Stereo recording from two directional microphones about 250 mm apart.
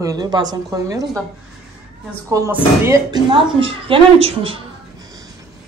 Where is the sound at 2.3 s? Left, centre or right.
Centre.